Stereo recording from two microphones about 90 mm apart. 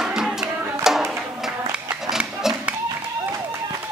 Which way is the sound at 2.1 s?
5° right (ahead or behind).